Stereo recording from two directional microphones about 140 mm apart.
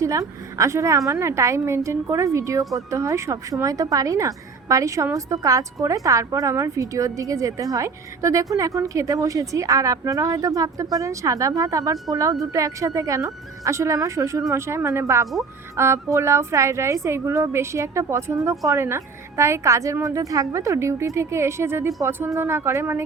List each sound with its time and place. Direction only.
0.0 s a woman's voice: 25° right (ahead or behind)